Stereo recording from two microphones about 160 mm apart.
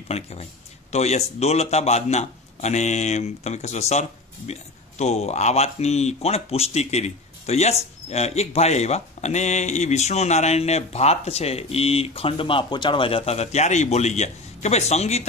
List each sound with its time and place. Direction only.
0.1 s speech: 40° left (ahead or behind)